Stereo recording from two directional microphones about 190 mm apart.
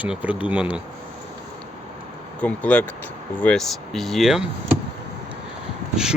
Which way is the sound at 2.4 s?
5° left (ahead or behind).